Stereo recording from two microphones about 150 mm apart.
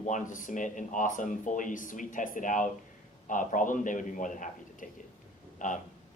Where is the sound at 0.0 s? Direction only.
55° left (ahead or behind).